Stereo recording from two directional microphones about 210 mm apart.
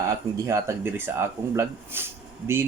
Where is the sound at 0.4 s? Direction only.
15° right (ahead or behind).